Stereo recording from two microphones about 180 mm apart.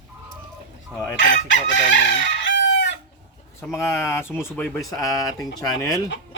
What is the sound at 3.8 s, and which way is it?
Speech, 15° left (ahead or behind).